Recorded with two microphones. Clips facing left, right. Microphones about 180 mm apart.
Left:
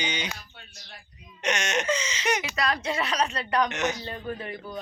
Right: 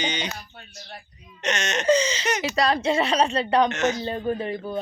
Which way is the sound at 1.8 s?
35° right (ahead or behind).